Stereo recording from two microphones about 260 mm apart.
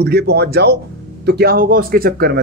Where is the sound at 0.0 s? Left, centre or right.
Right.